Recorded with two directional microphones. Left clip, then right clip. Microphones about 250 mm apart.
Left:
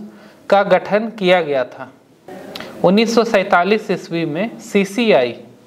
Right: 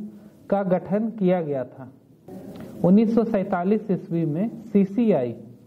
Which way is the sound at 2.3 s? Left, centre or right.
Centre.